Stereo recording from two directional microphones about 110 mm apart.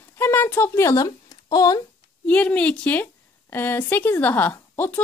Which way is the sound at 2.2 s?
10° left (ahead or behind).